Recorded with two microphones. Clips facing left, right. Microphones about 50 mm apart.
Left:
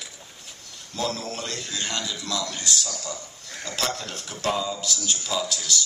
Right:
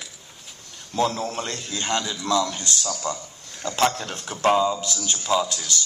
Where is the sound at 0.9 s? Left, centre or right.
Right.